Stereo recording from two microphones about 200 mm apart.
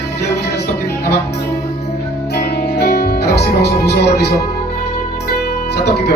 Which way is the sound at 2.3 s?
50° left (ahead or behind).